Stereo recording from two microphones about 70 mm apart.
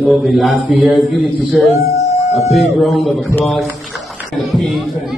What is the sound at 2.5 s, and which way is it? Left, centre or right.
Speech, centre.